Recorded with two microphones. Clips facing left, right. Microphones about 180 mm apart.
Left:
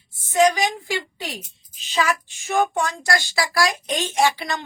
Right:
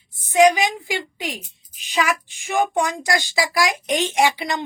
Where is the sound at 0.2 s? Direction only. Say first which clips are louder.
Right 3 dB; 15° right (ahead or behind).